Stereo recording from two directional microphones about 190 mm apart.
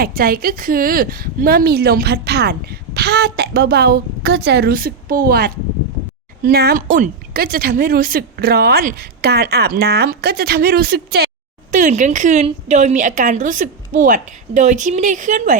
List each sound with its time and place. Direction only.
0.0 s a woman's voice: 50° right (ahead or behind)
11.7 s a woman's voice: 40° right (ahead or behind)